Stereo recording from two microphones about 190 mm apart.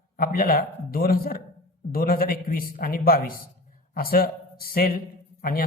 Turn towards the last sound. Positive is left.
turn(degrees=50)  # may be behind; listen again after turning